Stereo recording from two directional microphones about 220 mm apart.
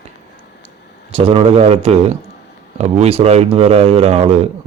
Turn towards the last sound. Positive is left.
turn(degrees=-30)  # may be behind; listen again after turning